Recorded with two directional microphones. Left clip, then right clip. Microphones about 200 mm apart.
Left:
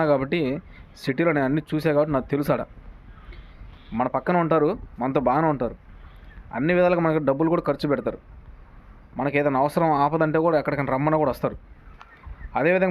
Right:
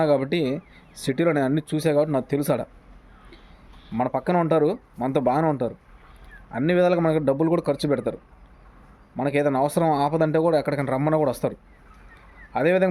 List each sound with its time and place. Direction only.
0.0 s speech: 10° right (ahead or behind)
3.9 s speech: 10° right (ahead or behind)
9.1 s speech: 10° right (ahead or behind)
12.5 s speech: 10° right (ahead or behind)